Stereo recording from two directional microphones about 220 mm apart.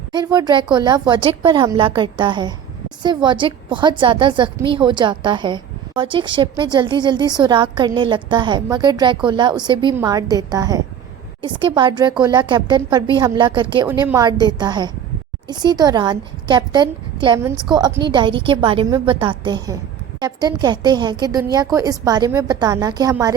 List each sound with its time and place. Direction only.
0.1 s a woman's voice: 20° right (ahead or behind)